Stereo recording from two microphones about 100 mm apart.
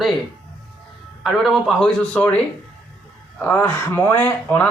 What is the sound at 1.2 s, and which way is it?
Speech, 5° left (ahead or behind).